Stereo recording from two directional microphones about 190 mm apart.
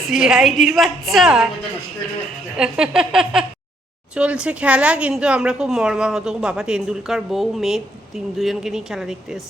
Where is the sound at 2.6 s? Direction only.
5° right (ahead or behind).